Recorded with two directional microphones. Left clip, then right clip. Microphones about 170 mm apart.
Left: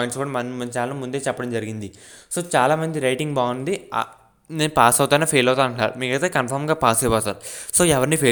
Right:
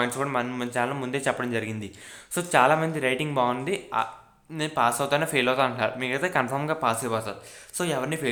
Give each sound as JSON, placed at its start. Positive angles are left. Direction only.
{"t": 0.0, "sound": "speech", "side_deg": 25}
{"t": 4.5, "sound": "speech", "side_deg": 50}